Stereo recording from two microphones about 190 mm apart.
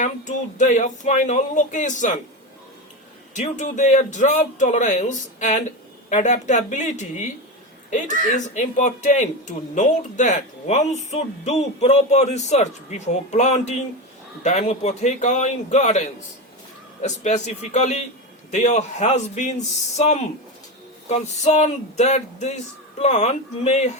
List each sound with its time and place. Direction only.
0.0 s speech: 40° left (ahead or behind)
3.3 s speech: 40° left (ahead or behind)